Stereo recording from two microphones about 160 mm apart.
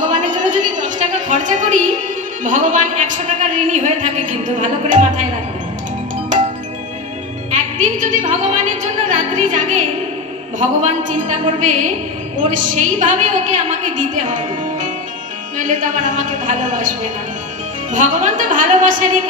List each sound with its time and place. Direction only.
0.1 s a sound: 50° right (ahead or behind)
2.4 s a woman's voice: 50° right (ahead or behind)
7.5 s a woman's voice: 50° right (ahead or behind)